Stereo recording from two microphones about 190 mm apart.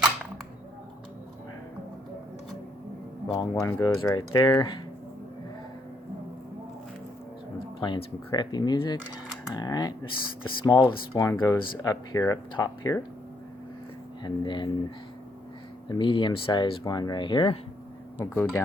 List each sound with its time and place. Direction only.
3.3 s speech: 15° left (ahead or behind)
7.8 s speech: 25° left (ahead or behind)
14.2 s speech: 25° left (ahead or behind)
15.9 s speech: 25° left (ahead or behind)
18.2 s speech: 10° left (ahead or behind)